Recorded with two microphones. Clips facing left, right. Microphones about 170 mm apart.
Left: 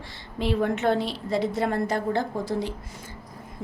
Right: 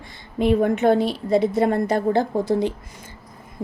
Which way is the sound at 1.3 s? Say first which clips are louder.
Right 6 dB; 20° right (ahead or behind).